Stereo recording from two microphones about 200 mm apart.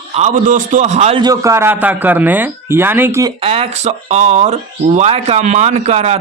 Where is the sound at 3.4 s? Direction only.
30° right (ahead or behind).